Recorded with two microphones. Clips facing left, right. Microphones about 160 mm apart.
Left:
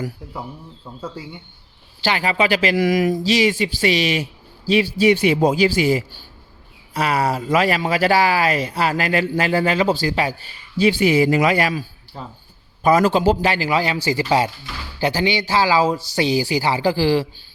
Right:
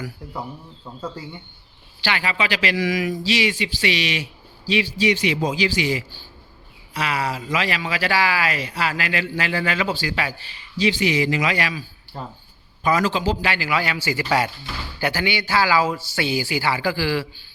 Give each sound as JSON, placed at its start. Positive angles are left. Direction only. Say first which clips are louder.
{"t": 0.9, "sound": "speech", "louder": "even", "side_deg": 5}
{"t": 2.0, "sound": "a man's voice", "louder": "left 5 dB", "side_deg": 35}